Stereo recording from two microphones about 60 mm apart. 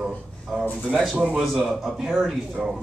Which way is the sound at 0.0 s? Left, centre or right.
Centre.